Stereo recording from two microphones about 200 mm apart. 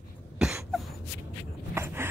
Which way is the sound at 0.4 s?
Centre (ahead or behind).